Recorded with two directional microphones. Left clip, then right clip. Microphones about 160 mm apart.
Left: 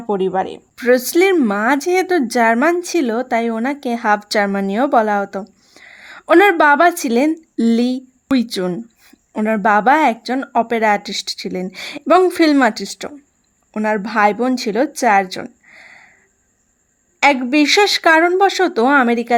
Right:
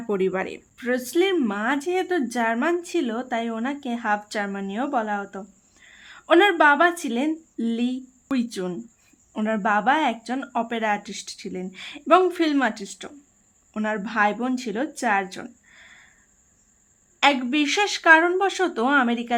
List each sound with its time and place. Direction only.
0.1 s speech: 20° left (ahead or behind)
0.8 s speech: 65° left (ahead or behind); by 15.9 s 45° left (ahead or behind)
17.2 s speech: 50° left (ahead or behind)